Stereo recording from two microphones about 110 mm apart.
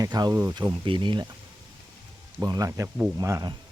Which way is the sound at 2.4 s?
30° right (ahead or behind).